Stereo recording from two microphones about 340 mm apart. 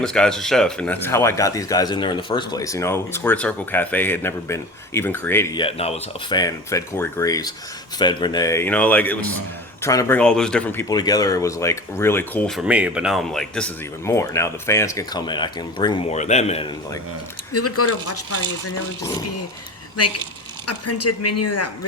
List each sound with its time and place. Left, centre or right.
0.0 s speech: centre
17.5 s speech: left
20.0 s speech: left